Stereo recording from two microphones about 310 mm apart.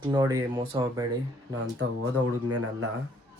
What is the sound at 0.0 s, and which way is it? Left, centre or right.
Speech, centre.